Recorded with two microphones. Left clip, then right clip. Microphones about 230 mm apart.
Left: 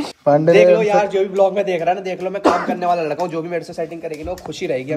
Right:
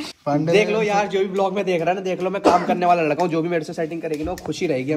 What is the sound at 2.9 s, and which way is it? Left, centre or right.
Speech, right.